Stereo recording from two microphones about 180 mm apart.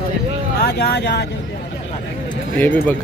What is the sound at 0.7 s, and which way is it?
Speech, 65° left (ahead or behind).